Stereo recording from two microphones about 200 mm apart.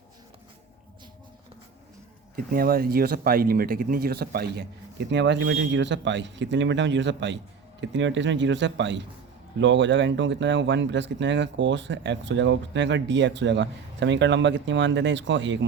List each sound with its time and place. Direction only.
2.3 s speech: 50° right (ahead or behind); by 15.5 s 65° right (ahead or behind)